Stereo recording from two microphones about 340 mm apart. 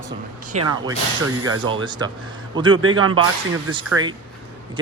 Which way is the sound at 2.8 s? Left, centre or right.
Right.